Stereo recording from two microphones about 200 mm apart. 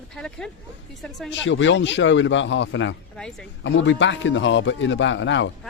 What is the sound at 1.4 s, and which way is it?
A man's voice, 65° left (ahead or behind).